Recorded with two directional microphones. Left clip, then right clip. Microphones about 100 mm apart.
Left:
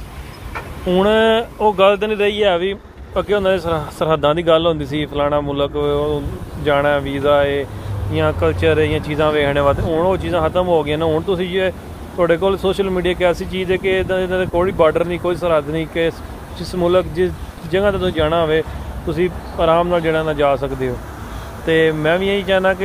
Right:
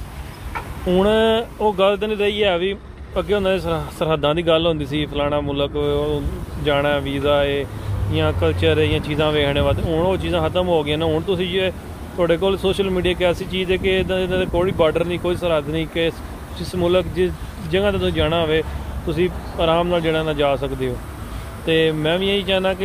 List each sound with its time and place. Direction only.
0.6 s speech: 15° right (ahead or behind)